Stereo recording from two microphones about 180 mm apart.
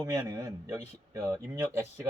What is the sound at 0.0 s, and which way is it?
Speech, 20° right (ahead or behind).